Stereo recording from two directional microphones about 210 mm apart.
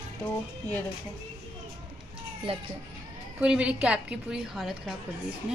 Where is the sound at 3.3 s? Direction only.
5° right (ahead or behind).